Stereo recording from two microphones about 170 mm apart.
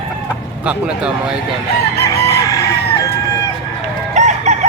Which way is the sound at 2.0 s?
75° left (ahead or behind).